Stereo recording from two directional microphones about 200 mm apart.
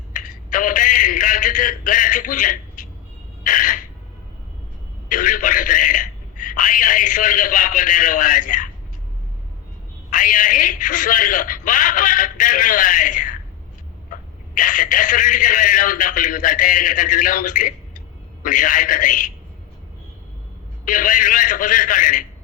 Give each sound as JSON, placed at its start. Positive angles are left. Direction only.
{"t": 0.1, "sound": "a man's voice", "side_deg": 40}
{"t": 3.4, "sound": "gasp", "side_deg": 40}
{"t": 5.0, "sound": "a man's voice", "side_deg": 40}
{"t": 10.1, "sound": "a man's voice", "side_deg": 40}
{"t": 20.8, "sound": "a man's voice", "side_deg": 40}